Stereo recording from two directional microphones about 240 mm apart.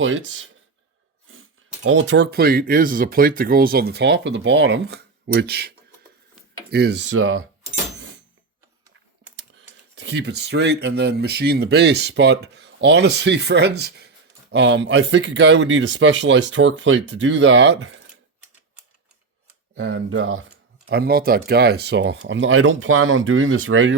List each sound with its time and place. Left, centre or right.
0.0 s speech: right
9.3 s speech: right
19.7 s speech: right
20.8 s speech: right